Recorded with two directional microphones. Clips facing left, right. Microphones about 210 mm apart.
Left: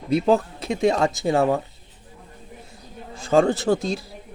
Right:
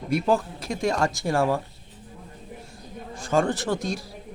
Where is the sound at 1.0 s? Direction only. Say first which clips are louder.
Left 3 dB; 20° left (ahead or behind).